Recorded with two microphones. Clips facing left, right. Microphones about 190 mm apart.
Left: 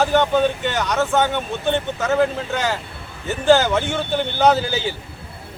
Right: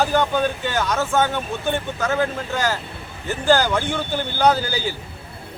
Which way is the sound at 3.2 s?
20° left (ahead or behind).